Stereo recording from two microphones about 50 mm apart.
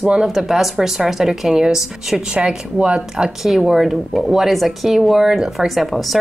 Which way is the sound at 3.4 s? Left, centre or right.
Centre.